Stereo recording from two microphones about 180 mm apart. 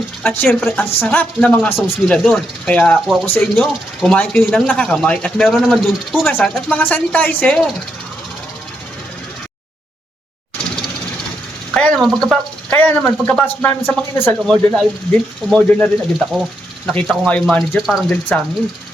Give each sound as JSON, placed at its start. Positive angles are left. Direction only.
{"t": 0.2, "sound": "a woman's voice", "side_deg": 10}
{"t": 11.7, "sound": "a sound", "side_deg": 5}
{"t": 13.2, "sound": "a woman's voice", "side_deg": 10}